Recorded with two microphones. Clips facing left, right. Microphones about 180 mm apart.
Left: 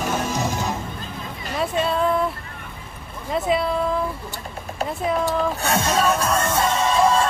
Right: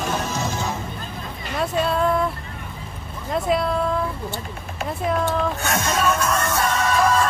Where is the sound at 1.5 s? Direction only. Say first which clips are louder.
Even; centre (ahead or behind).